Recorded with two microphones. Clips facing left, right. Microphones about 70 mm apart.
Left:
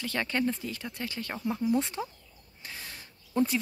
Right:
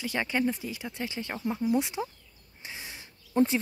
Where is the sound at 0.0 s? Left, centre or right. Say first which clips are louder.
Right 1 dB; centre.